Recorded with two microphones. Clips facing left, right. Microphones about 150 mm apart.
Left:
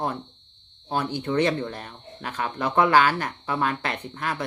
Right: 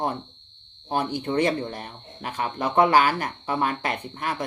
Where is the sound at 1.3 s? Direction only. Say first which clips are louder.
Left 1 dB; 30° right (ahead or behind).